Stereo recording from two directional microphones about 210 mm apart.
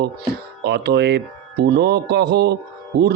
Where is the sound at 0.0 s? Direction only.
50° right (ahead or behind).